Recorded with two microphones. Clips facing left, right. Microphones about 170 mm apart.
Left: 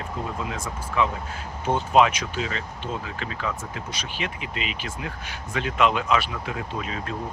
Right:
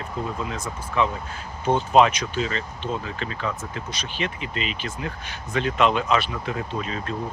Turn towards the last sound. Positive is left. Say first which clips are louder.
# right 2 dB
turn(degrees=10)  # may be behind; listen again after turning